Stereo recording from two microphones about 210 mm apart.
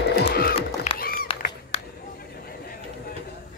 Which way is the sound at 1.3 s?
25° left (ahead or behind).